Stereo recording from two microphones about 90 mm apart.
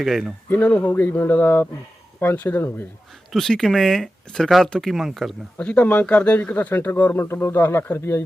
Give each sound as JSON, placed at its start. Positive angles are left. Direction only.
{"t": 0.0, "sound": "speech", "side_deg": 0}
{"t": 0.5, "sound": "speech", "side_deg": 15}
{"t": 3.3, "sound": "speech", "side_deg": 5}
{"t": 5.5, "sound": "speech", "side_deg": 15}